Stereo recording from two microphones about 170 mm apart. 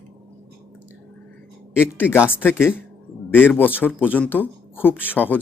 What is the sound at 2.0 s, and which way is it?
Speech, 15° left (ahead or behind).